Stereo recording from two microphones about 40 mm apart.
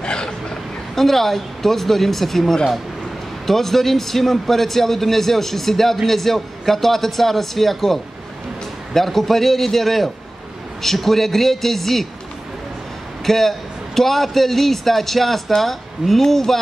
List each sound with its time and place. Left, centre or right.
0.0 s a sound: left
0.9 s a man's voice: centre
13.2 s a man's voice: centre